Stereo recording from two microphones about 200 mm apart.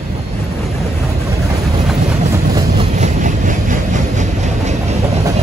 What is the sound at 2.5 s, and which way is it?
Train, 25° right (ahead or behind).